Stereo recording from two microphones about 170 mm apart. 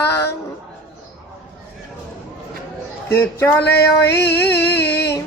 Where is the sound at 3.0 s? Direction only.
15° left (ahead or behind).